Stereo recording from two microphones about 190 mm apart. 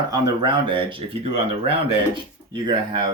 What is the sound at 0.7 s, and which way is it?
Speech, 25° right (ahead or behind).